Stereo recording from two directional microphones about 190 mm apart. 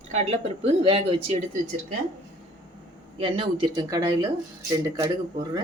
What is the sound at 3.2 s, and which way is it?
A woman's voice, 25° right (ahead or behind).